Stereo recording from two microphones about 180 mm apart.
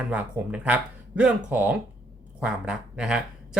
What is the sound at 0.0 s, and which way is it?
Speech, 10° right (ahead or behind).